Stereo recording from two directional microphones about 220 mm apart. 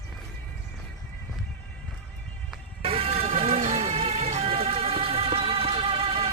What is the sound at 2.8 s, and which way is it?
Music, 25° right (ahead or behind).